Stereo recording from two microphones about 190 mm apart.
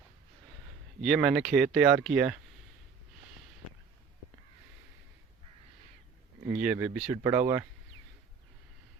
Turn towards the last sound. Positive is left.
turn(degrees=-20)  # may be behind; listen again after turning